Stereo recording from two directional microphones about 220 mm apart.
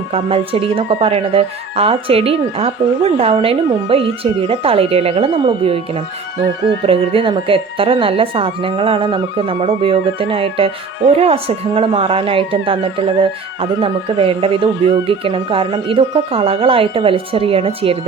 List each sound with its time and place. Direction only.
0.1 s speech: 25° right (ahead or behind)